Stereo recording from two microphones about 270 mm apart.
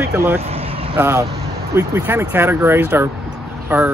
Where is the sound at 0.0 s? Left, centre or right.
Centre.